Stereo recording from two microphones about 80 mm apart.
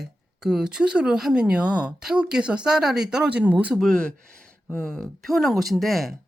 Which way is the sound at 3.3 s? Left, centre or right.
Centre.